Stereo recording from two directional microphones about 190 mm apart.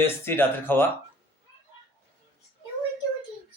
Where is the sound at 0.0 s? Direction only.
10° left (ahead or behind).